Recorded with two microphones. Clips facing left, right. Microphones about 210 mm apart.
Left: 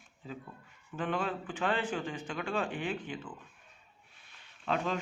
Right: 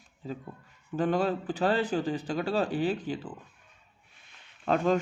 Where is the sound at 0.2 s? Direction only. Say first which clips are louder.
Right 6 dB; 40° right (ahead or behind).